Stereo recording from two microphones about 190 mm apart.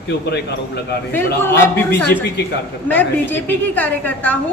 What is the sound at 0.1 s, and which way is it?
Speech, 60° left (ahead or behind).